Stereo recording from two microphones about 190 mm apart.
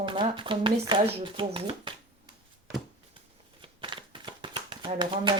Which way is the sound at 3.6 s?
25° right (ahead or behind).